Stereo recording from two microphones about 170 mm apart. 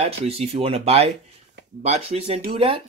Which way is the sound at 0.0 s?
40° right (ahead or behind).